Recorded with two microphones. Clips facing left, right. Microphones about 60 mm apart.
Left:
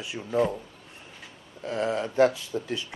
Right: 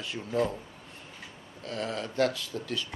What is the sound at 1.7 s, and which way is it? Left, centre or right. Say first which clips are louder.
Speech: left 6 dB; left.